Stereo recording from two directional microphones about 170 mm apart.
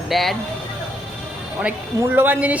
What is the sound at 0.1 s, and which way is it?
Speech, centre (ahead or behind).